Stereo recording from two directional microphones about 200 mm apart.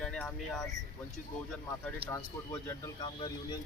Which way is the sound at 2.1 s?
10° left (ahead or behind).